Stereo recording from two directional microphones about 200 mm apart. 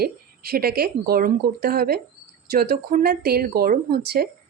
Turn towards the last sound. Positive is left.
turn(degrees=-50)  # may be behind; listen again after turning